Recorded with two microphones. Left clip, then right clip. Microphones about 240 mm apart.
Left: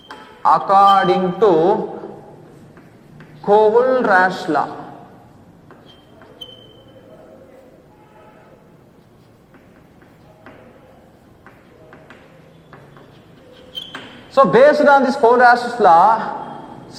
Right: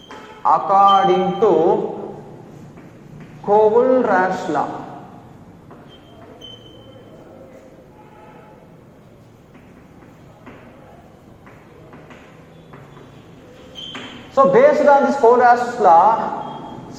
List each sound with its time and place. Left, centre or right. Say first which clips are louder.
0.4 s a man's voice: left 2 dB; left
3.4 s a man's voice: left 1 dB; left
14.3 s a man's voice: left 1 dB; left